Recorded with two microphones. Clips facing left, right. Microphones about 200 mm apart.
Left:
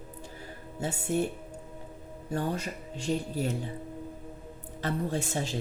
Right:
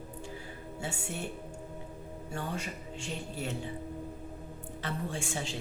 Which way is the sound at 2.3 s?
40° left (ahead or behind).